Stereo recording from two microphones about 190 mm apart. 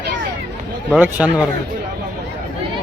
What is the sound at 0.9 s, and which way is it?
Speech, 10° right (ahead or behind).